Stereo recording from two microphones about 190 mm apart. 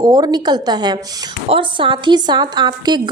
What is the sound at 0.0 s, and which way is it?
A woman's voice, 20° right (ahead or behind).